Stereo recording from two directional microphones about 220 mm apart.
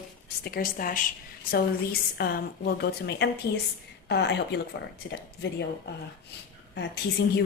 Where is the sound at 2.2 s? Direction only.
45° left (ahead or behind).